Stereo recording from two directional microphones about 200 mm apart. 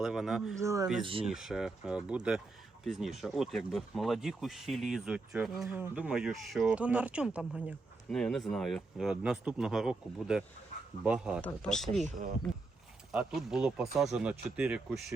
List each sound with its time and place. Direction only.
0.0 s speech: centre (ahead or behind)
0.6 s speech: 15° right (ahead or behind)
1.0 s speech: 25° right (ahead or behind)
1.3 s speech: centre (ahead or behind)
11.3 s speech: 5° left (ahead or behind)
13.1 s speech: 5° right (ahead or behind)